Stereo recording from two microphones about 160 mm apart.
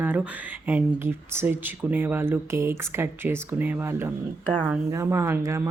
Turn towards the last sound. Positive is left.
turn(degrees=-20)  # may be behind; listen again after turning